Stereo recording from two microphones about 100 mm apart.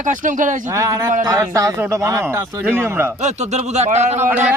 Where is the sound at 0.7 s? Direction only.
30° right (ahead or behind).